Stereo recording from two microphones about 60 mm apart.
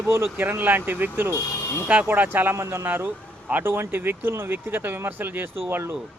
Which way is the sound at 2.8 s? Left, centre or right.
Right.